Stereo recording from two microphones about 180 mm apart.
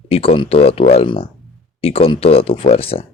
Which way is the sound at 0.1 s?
30° left (ahead or behind).